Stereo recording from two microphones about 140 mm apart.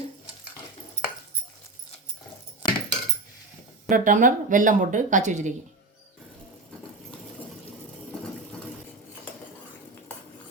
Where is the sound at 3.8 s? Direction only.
70° right (ahead or behind).